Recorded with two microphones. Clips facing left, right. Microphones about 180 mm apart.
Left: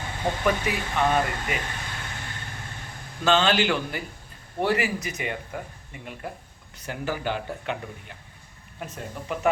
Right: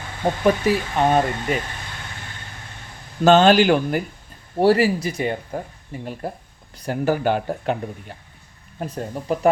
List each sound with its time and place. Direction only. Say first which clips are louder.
0.4 s speech: right 8 dB; 35° right (ahead or behind)
3.2 s speech: right 8 dB; 45° right (ahead or behind)